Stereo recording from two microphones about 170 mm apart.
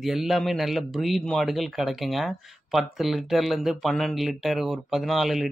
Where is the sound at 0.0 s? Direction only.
Centre (ahead or behind).